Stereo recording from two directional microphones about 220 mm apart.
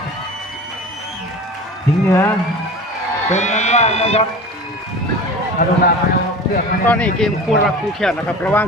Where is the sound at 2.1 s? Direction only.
10° left (ahead or behind).